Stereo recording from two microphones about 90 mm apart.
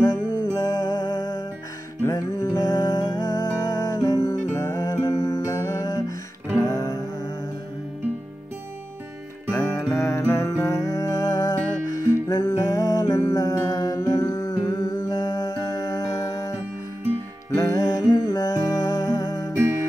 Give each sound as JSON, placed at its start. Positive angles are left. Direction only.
{"t": 0.0, "sound": "music", "side_deg": 45}
{"t": 9.5, "sound": "music", "side_deg": 30}
{"t": 17.6, "sound": "music", "side_deg": 35}